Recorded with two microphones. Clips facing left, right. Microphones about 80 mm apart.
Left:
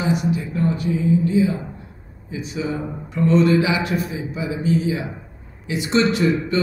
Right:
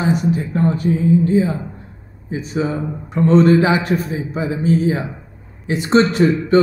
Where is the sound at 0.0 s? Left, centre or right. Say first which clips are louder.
Right 3 dB; right.